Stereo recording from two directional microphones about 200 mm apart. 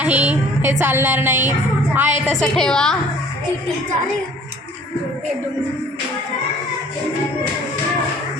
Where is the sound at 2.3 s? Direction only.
Centre (ahead or behind).